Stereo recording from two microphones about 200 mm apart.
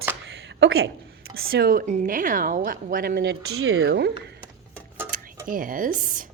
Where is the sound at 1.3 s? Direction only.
50° right (ahead or behind).